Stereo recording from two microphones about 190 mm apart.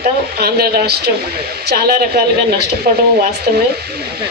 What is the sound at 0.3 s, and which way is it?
Speech, 55° right (ahead or behind).